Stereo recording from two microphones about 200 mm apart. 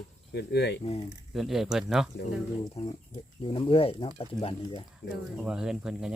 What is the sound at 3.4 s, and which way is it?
Speech, 25° left (ahead or behind).